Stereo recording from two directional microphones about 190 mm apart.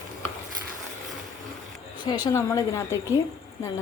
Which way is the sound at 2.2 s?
15° left (ahead or behind).